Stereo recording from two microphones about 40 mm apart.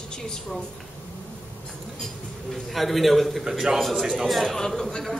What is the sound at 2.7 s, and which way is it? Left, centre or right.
Speech, centre.